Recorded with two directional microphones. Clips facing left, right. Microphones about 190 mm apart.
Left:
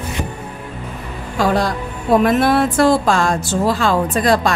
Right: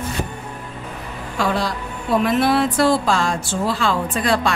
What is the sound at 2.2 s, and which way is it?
Speech, 50° left (ahead or behind).